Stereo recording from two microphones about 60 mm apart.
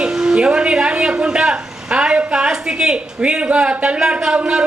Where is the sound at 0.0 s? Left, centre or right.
Centre.